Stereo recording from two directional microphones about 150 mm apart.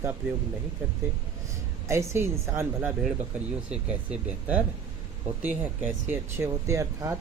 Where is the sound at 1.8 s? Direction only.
20° right (ahead or behind).